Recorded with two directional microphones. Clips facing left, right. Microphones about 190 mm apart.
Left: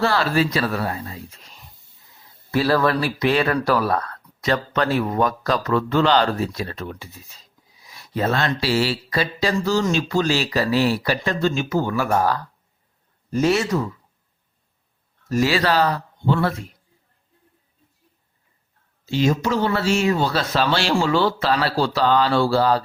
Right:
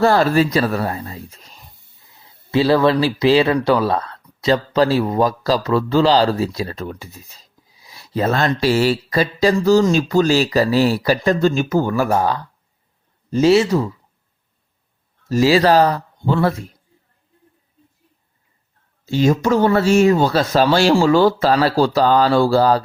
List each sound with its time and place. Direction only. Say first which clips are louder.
0.0 s speech: right 6 dB; 45° right (ahead or behind)
2.5 s speech: right 4 dB; 25° right (ahead or behind); by 12.1 s 40° right (ahead or behind)
13.3 s speech: right 6 dB; 30° right (ahead or behind)
15.3 s speech: right 6 dB; 35° right (ahead or behind)
19.0 s speech: right 4 dB; 45° right (ahead or behind)